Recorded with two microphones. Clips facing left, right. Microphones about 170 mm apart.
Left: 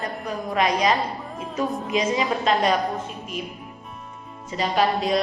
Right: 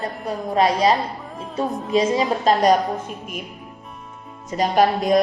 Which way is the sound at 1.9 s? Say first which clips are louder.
Right 5 dB; 35° right (ahead or behind).